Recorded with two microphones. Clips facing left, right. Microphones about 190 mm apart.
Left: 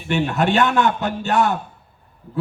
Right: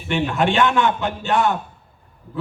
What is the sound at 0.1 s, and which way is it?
A man's voice, 40° left (ahead or behind).